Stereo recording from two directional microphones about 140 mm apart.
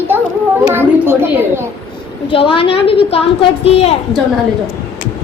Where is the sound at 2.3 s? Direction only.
40° left (ahead or behind).